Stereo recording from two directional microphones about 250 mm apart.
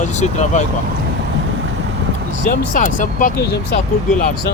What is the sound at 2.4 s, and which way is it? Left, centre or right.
Speech, left.